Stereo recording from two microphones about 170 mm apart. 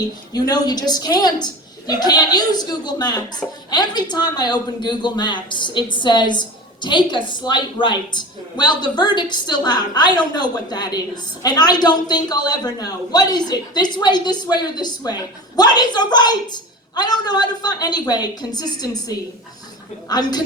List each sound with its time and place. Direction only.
0.3 s a woman's voice: 25° left (ahead or behind)